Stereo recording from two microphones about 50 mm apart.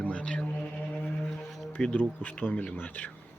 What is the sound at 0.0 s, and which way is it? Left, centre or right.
Music, left.